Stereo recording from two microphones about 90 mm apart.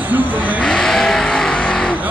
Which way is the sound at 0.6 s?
5° left (ahead or behind).